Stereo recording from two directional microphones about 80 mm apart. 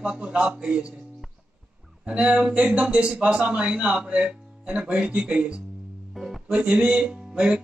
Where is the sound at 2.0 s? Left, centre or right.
Centre.